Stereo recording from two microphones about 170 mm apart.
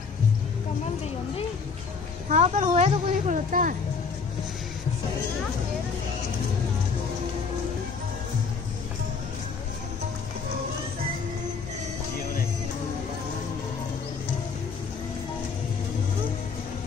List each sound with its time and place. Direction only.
2.2 s speech: 45° right (ahead or behind)